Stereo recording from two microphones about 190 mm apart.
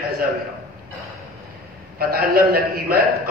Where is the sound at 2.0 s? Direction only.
50° right (ahead or behind).